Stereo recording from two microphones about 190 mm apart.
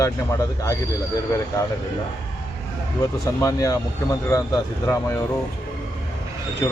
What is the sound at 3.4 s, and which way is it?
Speech, 20° left (ahead or behind).